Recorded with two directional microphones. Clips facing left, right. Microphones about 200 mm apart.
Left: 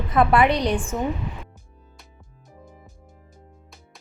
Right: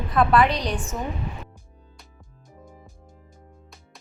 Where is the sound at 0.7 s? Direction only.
50° left (ahead or behind).